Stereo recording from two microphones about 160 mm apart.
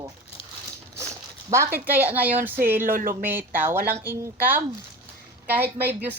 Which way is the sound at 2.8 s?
60° right (ahead or behind).